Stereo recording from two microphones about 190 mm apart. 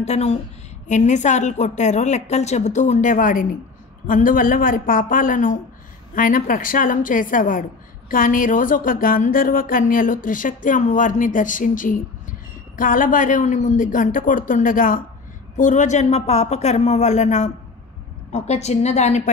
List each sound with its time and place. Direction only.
0.0 s a woman's voice: 35° left (ahead or behind)